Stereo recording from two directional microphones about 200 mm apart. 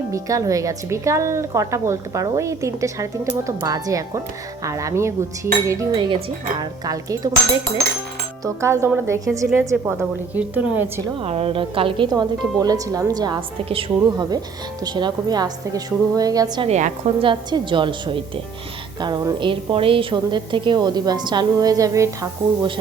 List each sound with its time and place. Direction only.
0.1 s speech: 15° right (ahead or behind)
8.4 s speech: 15° right (ahead or behind)
11.2 s a woman's voice: 30° right (ahead or behind)
16.6 s a woman's voice: 35° right (ahead or behind); by 22.7 s 15° right (ahead or behind)